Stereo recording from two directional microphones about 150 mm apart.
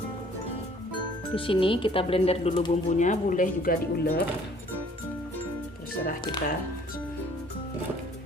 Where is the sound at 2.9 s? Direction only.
55° left (ahead or behind); by 4.2 s 70° left (ahead or behind).